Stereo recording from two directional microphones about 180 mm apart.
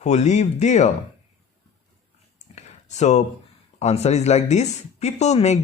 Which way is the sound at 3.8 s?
35° left (ahead or behind).